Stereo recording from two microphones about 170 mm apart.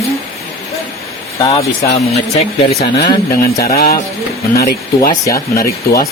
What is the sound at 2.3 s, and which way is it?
Speech, 40° left (ahead or behind).